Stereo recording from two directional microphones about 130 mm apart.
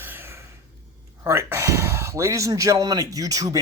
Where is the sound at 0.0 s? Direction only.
15° right (ahead or behind).